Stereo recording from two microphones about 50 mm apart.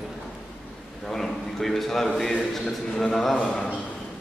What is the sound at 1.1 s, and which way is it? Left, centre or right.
A man's voice, centre.